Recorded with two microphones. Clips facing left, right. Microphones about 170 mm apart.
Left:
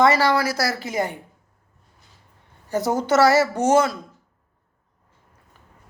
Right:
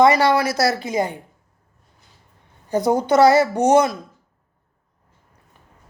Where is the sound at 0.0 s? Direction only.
20° right (ahead or behind).